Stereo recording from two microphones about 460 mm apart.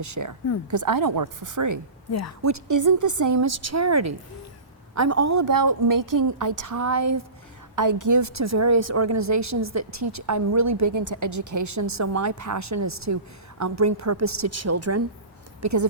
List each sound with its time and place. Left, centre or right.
0.0 s a woman's voice: right